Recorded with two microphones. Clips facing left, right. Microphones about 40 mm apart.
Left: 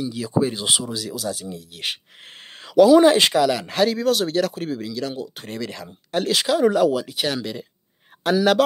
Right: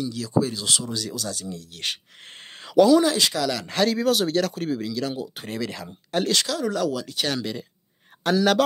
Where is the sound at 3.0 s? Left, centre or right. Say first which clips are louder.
Left 6 dB; left.